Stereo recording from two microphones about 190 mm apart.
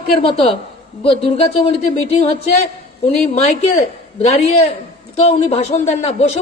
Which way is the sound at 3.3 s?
35° left (ahead or behind).